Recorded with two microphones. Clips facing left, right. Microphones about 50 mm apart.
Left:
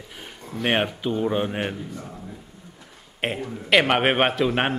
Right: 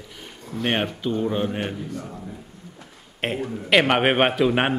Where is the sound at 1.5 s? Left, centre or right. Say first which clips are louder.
Even; left.